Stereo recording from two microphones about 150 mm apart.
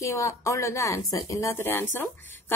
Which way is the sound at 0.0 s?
20° left (ahead or behind).